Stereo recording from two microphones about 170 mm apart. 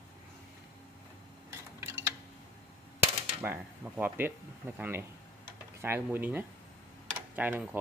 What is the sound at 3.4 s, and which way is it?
Speech, 10° right (ahead or behind).